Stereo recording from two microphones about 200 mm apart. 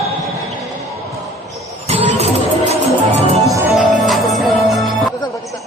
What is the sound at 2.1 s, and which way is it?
Music, 30° right (ahead or behind).